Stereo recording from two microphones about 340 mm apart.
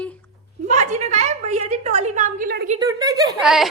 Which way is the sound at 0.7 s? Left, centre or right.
Right.